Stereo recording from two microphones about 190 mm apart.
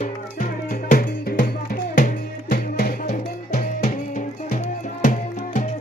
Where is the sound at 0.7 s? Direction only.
45° left (ahead or behind).